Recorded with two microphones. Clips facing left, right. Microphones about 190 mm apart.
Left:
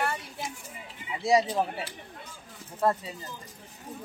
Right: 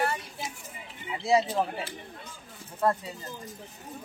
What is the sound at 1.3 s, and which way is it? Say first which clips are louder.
Speech: even; 15° left (ahead or behind).